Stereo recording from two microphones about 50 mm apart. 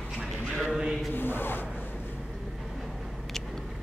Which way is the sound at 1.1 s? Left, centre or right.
Left.